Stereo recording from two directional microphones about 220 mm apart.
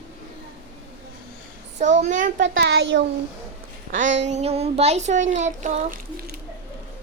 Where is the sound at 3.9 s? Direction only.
35° right (ahead or behind).